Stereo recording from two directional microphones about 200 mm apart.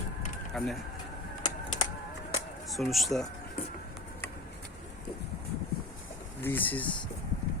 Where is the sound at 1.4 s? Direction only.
20° left (ahead or behind).